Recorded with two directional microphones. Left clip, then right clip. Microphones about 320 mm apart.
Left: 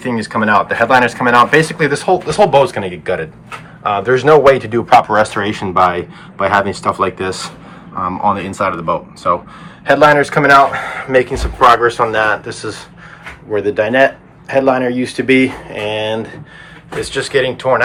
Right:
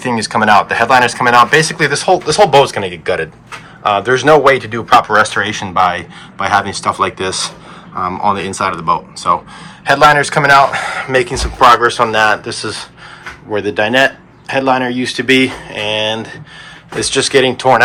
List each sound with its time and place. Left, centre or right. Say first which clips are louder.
0.0 s speech: right 3 dB; centre
17.0 s speech: right 4 dB; centre